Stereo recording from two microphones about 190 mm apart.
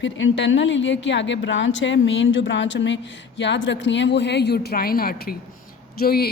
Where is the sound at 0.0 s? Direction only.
75° left (ahead or behind).